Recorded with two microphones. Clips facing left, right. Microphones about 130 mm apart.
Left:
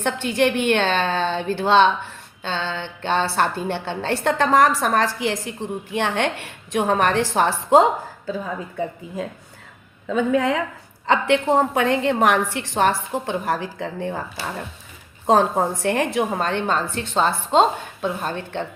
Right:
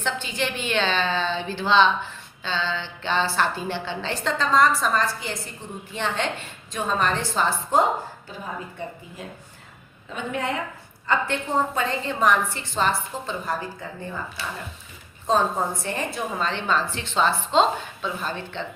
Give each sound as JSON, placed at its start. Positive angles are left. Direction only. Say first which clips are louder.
{"t": 0.0, "sound": "a woman's voice", "louder": "left 8 dB", "side_deg": 65}
{"t": 11.0, "sound": "a woman's voice", "louder": "left 7 dB", "side_deg": 85}